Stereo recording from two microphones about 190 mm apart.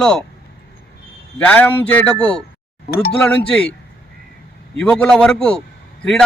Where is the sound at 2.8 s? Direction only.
55° left (ahead or behind).